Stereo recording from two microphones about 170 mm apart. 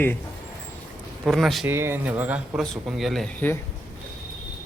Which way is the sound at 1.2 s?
Centre (ahead or behind).